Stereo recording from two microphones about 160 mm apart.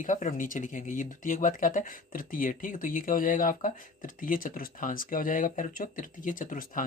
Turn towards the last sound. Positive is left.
turn(degrees=55)  # may be behind; listen again after turning